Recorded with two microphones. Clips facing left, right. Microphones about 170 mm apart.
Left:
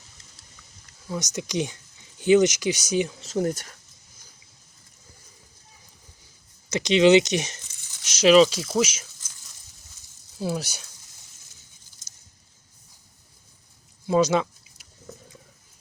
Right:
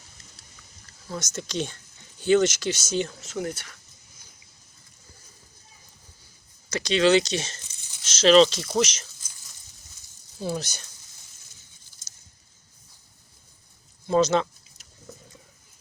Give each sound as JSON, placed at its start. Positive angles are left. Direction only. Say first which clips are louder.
{"t": 1.0, "sound": "speech", "louder": "left 3 dB", "side_deg": 15}
{"t": 3.2, "sound": "speech", "louder": "left 6 dB", "side_deg": 35}
{"t": 6.7, "sound": "speech", "louder": "left 3 dB", "side_deg": 20}
{"t": 10.3, "sound": "speech", "louder": "left 1 dB", "side_deg": 5}
{"t": 14.1, "sound": "a sound", "louder": "even", "side_deg": 10}